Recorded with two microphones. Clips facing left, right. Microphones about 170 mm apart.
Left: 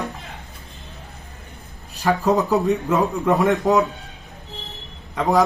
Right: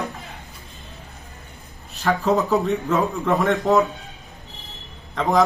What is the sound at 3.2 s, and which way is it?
Speech, 15° left (ahead or behind).